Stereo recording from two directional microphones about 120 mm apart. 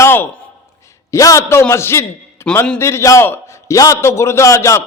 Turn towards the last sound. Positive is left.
turn(degrees=25)  # may be behind; listen again after turning